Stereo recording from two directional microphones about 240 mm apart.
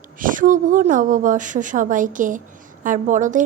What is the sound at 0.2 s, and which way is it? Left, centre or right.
A woman's voice, right.